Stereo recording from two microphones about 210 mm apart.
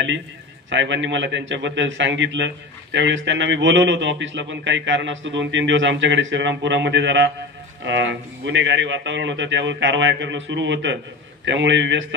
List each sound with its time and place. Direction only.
0.7 s a man's voice: 60° right (ahead or behind)